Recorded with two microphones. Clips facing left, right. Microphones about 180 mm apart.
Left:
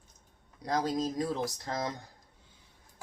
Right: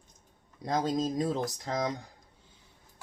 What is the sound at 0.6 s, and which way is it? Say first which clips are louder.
Speech: right 1 dB; 25° right (ahead or behind).